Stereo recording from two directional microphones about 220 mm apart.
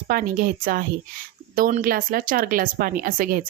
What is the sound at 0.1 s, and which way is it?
Speech, 40° right (ahead or behind).